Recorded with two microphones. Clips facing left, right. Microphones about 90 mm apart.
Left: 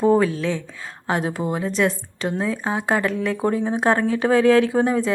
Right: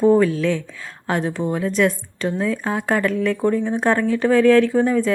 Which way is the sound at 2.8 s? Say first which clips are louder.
Right 2 dB; 5° left (ahead or behind).